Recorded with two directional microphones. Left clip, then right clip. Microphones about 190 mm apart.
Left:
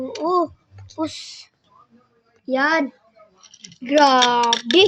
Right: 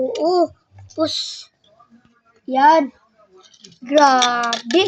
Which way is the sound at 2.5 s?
15° left (ahead or behind).